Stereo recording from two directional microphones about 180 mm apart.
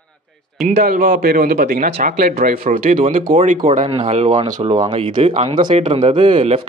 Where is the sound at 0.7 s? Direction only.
40° right (ahead or behind).